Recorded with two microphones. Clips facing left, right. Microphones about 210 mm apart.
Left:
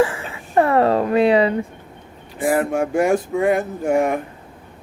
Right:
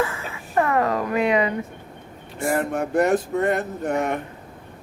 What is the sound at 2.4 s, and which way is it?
Speech, centre (ahead or behind).